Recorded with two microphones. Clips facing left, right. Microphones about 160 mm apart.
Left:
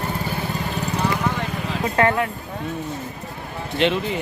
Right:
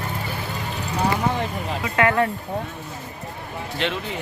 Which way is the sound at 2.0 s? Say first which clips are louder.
Left 1 dB; 35° left (ahead or behind).